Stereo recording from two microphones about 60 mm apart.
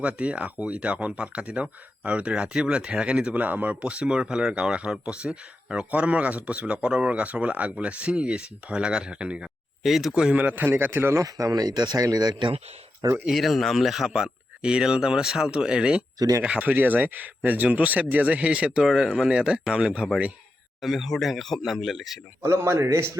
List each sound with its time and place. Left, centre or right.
0.0 s speech: right
3.3 s speech: right
9.8 s speech: centre
10.3 s speech: right
11.2 s speech: right
13.3 s speech: centre
16.1 s speech: right
16.4 s speech: right
18.8 s speech: centre
20.8 s speech: centre
22.5 s a man's voice: right